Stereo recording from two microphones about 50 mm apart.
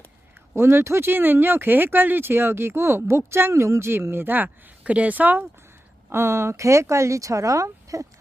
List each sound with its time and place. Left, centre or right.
0.5 s speech: right
4.8 s speech: right
6.1 s speech: right